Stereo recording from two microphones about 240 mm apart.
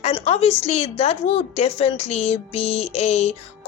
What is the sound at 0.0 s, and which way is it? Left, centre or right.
A woman's voice, left.